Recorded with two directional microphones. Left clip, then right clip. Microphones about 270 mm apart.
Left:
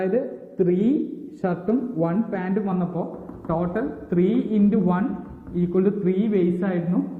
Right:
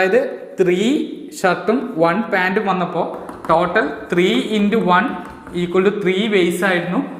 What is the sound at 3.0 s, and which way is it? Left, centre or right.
Speech, centre.